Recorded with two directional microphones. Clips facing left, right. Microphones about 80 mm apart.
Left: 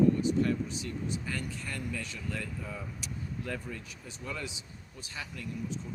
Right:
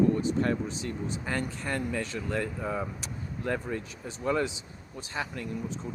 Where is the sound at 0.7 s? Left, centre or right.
Right.